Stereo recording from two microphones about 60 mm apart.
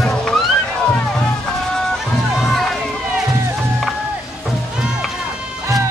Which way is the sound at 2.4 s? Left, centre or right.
Centre.